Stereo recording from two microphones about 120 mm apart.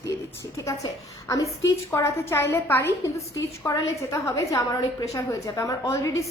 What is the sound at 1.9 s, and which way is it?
A woman's voice, 25° left (ahead or behind).